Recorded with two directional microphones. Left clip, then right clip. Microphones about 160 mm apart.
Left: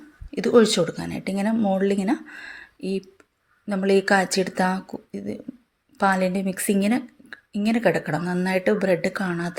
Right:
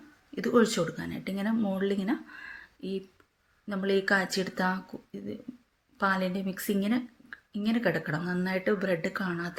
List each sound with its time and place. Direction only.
0.3 s speech: 30° left (ahead or behind)
3.7 s speech: 35° left (ahead or behind)